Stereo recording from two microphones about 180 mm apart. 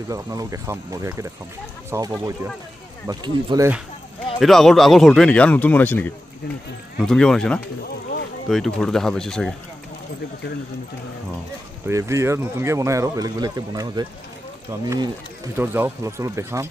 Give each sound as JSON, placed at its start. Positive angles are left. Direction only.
{"t": 0.1, "sound": "speech", "side_deg": -20}
{"t": 4.4, "sound": "speech", "side_deg": 0}
{"t": 11.8, "sound": "speech", "side_deg": -15}
{"t": 15.5, "sound": "speech", "side_deg": -10}